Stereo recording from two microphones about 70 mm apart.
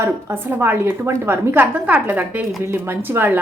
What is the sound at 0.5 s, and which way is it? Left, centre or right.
A woman's voice, right.